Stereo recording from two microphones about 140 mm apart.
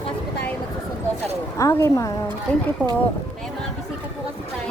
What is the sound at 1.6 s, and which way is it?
Speech, 20° left (ahead or behind).